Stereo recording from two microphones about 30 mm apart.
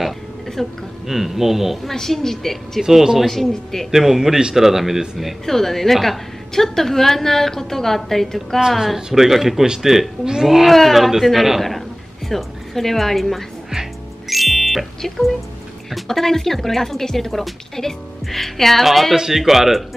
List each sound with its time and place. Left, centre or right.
0.6 s a woman's voice: centre
1.0 s speech: centre
1.9 s a woman's voice: centre
2.8 s speech: centre
3.3 s a woman's voice: centre
3.9 s speech: centre
5.4 s a woman's voice: centre
8.5 s speech: centre
10.7 s speech: centre
12.3 s a woman's voice: centre
14.3 s music: centre
15.0 s a woman's voice: centre
19.1 s speech: centre